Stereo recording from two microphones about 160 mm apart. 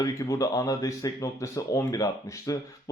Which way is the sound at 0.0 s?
20° left (ahead or behind).